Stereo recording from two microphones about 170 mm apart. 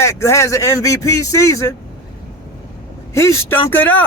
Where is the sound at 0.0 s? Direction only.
15° left (ahead or behind).